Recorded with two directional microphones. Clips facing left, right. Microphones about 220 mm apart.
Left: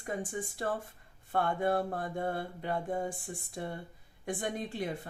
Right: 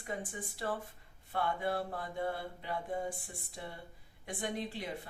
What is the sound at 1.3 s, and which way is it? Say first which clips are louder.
Speech: left 5 dB; 50° left (ahead or behind).